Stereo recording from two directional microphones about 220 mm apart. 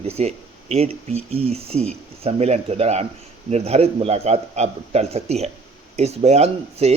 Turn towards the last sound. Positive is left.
turn(degrees=-30)  # may be behind; listen again after turning